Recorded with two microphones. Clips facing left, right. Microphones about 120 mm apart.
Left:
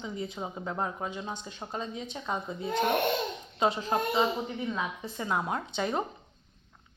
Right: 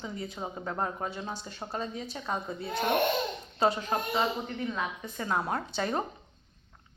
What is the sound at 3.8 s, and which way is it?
A woman's voice, 5° left (ahead or behind).